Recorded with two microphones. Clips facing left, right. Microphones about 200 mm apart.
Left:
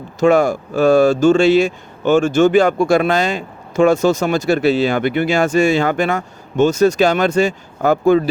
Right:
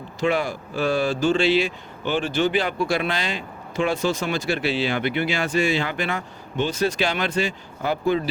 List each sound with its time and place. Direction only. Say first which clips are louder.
0.2 s speech: left 10 dB; 45° left (ahead or behind)